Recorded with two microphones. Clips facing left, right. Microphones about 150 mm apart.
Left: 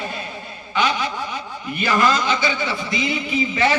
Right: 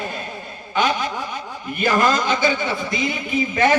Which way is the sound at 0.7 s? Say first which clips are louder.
Right 1 dB; 45° right (ahead or behind).